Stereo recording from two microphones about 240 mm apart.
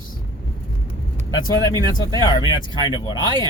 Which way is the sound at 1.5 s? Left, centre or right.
Centre.